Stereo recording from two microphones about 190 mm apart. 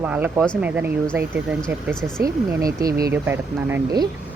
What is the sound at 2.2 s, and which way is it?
Speech, 20° right (ahead or behind).